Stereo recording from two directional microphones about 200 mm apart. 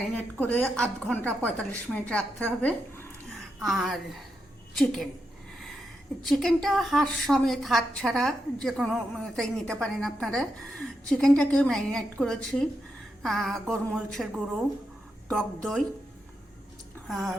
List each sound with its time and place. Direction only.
0.2 s a woman's voice: 10° left (ahead or behind)
6.2 s a woman's voice: centre (ahead or behind)
17.1 s a woman's voice: centre (ahead or behind)